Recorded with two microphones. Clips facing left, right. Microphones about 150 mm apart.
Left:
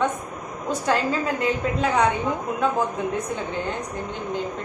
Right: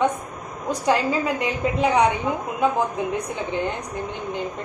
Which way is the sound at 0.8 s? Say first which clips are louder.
Right 2 dB; 15° right (ahead or behind).